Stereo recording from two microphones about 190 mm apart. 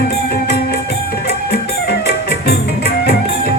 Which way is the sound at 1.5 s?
60° left (ahead or behind).